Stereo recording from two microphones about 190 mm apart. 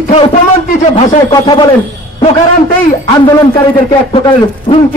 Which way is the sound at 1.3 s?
20° left (ahead or behind).